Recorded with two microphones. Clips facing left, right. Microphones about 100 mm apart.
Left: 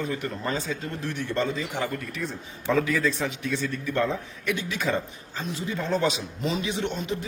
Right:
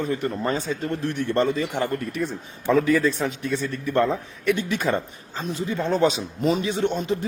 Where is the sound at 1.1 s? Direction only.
55° right (ahead or behind).